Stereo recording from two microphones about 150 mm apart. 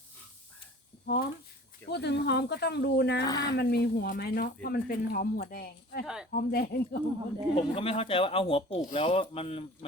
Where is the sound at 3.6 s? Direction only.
90° left.